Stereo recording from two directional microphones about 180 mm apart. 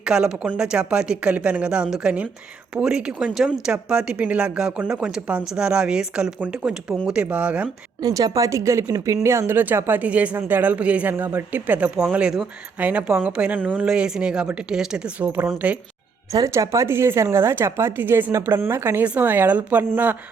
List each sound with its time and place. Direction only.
0.0 s speech: 5° right (ahead or behind)
8.0 s speech: 20° right (ahead or behind)
16.3 s speech: 20° right (ahead or behind)